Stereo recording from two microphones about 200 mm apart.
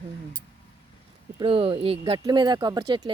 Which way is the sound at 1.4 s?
30° right (ahead or behind).